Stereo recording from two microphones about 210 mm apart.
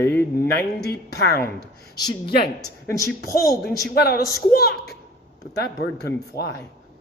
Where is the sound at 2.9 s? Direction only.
15° left (ahead or behind).